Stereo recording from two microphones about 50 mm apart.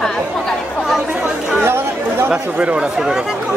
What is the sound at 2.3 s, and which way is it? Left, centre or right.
Speech, right.